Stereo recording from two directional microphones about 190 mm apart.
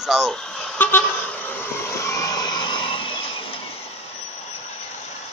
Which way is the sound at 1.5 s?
10° left (ahead or behind).